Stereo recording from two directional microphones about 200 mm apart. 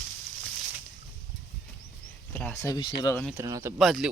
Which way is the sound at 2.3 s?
10° left (ahead or behind).